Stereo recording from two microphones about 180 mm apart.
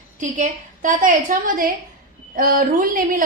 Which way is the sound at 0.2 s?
45° right (ahead or behind).